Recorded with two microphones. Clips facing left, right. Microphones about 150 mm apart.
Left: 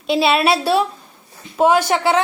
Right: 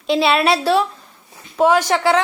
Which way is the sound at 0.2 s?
25° left (ahead or behind).